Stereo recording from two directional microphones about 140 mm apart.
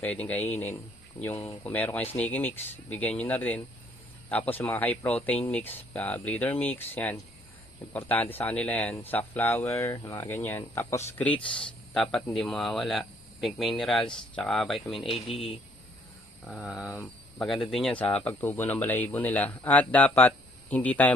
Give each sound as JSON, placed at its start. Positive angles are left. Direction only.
{"t": 0.0, "sound": "speech", "side_deg": 10}
{"t": 11.4, "sound": "speech", "side_deg": 35}
{"t": 11.9, "sound": "speech", "side_deg": 5}
{"t": 16.4, "sound": "speech", "side_deg": -5}
{"t": 17.3, "sound": "speech", "side_deg": 0}